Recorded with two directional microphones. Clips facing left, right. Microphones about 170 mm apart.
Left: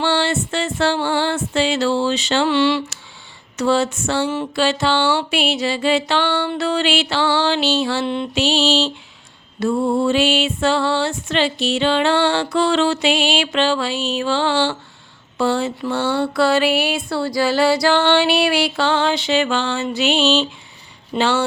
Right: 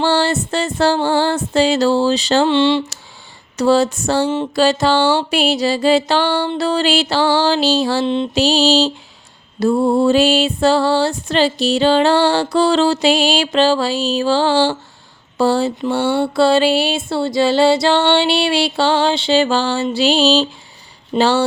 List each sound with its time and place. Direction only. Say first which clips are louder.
0.0 s music: right 3 dB; 40° right (ahead or behind)
2.5 s music: right 3 dB; 25° right (ahead or behind)
3.6 s music: right 4 dB; 35° right (ahead or behind)
8.0 s music: right 4 dB; 25° right (ahead or behind)
8.4 s music: right 4 dB; 40° right (ahead or behind)